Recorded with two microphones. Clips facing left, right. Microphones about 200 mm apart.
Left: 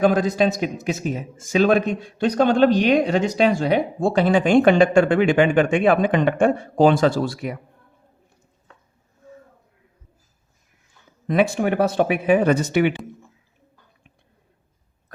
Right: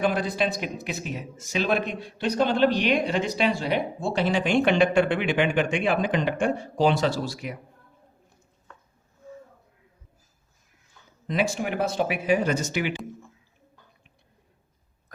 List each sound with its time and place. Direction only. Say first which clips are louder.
0.0 s a man's voice: left 7 dB; 45° left (ahead or behind)
11.3 s speech: left 7 dB; 55° left (ahead or behind)